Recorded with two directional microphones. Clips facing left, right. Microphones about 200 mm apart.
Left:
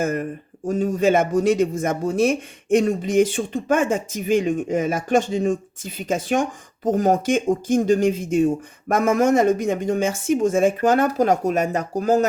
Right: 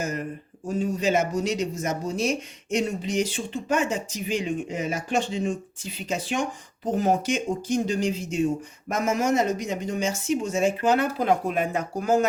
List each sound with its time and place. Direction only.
0.0 s speech: 55° left (ahead or behind); by 12.3 s 40° left (ahead or behind)